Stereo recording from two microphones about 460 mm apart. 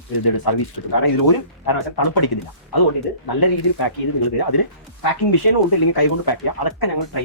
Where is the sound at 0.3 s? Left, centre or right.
Left.